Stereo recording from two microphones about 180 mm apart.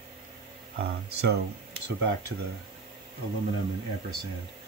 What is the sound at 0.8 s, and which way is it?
Speech, 60° right (ahead or behind).